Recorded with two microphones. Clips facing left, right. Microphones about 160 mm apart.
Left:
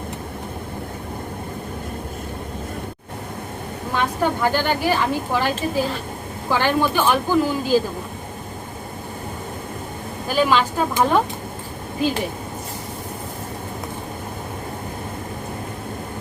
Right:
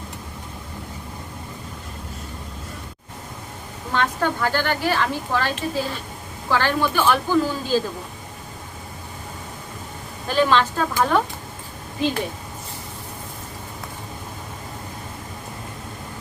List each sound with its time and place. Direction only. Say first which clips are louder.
3.9 s a woman's voice: left 1 dB; 15° left (ahead or behind)
10.2 s a woman's voice: even; 10° left (ahead or behind)